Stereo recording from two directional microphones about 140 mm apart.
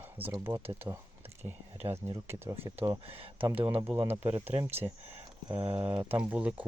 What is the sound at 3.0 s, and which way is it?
Speech, 45° right (ahead or behind).